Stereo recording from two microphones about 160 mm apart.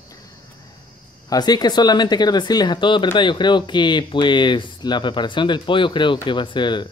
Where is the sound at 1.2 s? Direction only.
25° left (ahead or behind).